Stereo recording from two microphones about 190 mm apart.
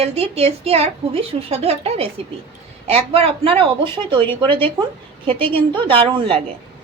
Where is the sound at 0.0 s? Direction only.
35° right (ahead or behind).